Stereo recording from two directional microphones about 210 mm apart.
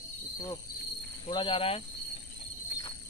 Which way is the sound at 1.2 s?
25° left (ahead or behind).